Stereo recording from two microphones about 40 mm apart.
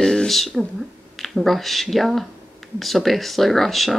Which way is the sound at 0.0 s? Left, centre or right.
Centre.